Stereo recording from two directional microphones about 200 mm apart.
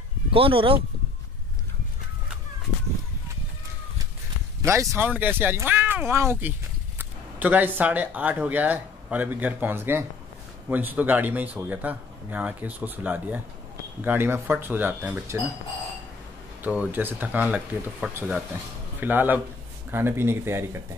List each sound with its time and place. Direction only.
0.3 s speech: 25° right (ahead or behind)
4.6 s speech: 15° right (ahead or behind)
16.6 s speech: 5° right (ahead or behind)